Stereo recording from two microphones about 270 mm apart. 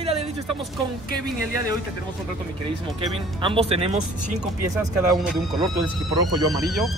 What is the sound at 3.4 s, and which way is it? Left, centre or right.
Speech, centre.